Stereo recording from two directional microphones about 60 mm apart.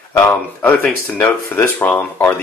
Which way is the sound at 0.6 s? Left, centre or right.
Left.